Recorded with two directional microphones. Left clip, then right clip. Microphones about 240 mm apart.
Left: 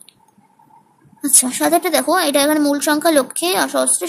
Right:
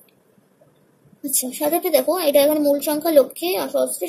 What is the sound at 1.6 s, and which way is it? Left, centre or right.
A woman's voice, left.